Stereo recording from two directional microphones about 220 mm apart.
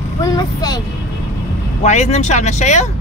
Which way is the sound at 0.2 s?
20° left (ahead or behind).